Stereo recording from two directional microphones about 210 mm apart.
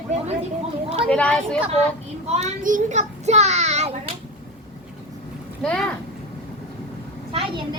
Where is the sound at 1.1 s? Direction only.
5° left (ahead or behind).